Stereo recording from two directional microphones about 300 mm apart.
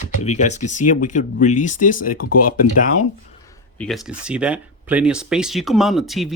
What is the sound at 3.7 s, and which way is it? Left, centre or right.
Speech, centre.